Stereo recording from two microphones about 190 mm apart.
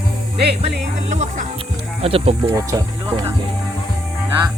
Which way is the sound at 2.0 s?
30° right (ahead or behind).